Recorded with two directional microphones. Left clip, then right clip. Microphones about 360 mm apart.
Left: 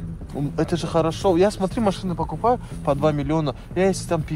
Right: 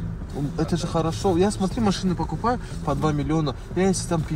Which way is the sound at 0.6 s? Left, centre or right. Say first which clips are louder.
Left 4 dB; left.